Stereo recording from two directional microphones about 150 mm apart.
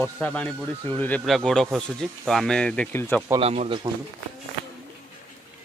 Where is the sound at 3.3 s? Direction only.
40° right (ahead or behind).